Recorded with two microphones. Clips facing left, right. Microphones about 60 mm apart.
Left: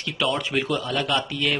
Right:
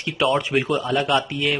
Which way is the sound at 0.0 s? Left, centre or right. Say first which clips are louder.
Right 4 dB; right.